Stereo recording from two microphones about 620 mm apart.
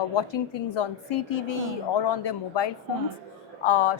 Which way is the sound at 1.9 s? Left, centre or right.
Left.